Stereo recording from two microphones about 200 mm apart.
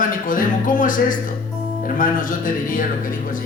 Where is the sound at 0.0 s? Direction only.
45° left (ahead or behind).